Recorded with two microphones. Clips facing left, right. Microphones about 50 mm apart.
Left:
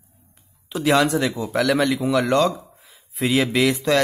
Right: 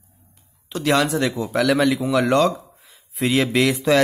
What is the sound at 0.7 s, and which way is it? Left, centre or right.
Speech, centre.